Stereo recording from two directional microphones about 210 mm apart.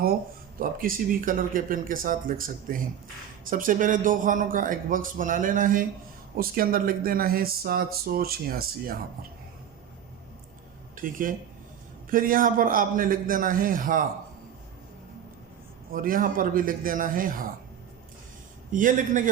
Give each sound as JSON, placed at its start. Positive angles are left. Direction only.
{"t": 0.6, "sound": "a man's voice", "side_deg": -40}
{"t": 10.9, "sound": "a man's voice", "side_deg": -40}
{"t": 15.9, "sound": "a man's voice", "side_deg": -40}
{"t": 18.7, "sound": "a man's voice", "side_deg": -40}